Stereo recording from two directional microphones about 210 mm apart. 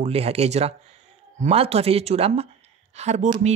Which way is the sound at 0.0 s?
30° right (ahead or behind).